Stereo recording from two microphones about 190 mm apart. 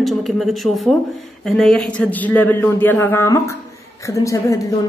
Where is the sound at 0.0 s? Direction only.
Centre (ahead or behind).